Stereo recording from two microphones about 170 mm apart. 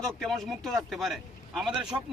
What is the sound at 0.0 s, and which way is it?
A man's voice, centre (ahead or behind).